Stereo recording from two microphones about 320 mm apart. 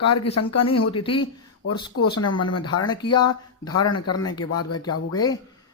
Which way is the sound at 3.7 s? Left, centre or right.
Left.